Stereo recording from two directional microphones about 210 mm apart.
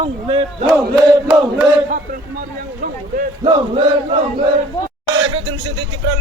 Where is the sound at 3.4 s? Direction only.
25° right (ahead or behind).